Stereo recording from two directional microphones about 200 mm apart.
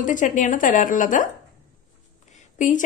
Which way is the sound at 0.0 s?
40° left (ahead or behind).